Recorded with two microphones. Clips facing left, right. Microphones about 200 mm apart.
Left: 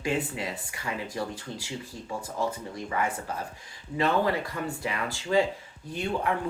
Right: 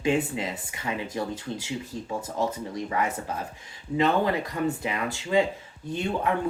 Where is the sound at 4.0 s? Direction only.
20° right (ahead or behind).